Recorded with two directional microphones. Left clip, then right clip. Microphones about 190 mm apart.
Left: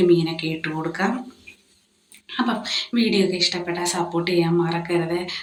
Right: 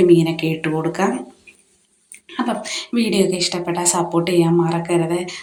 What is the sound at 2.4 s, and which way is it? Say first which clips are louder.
A woman's voice: right 1 dB; 15° right (ahead or behind).